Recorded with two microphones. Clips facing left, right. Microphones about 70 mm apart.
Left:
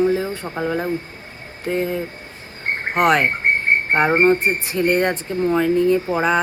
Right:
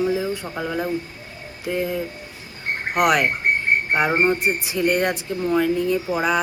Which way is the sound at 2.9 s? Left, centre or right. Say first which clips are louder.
Left 2 dB; left.